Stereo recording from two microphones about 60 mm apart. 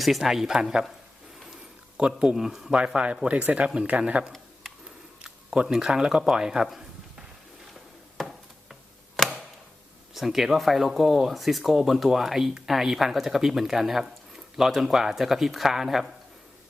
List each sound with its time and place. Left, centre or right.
0.0 s speech: centre
2.0 s speech: centre
5.2 s a sound: centre
5.6 s speech: centre
10.2 s speech: centre